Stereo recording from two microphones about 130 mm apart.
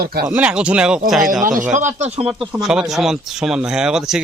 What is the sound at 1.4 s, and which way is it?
Speech, 85° right.